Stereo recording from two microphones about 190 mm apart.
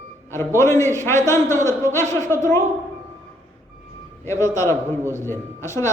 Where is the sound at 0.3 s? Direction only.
15° left (ahead or behind).